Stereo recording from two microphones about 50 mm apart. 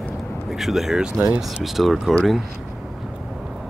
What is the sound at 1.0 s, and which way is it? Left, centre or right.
Speech, centre.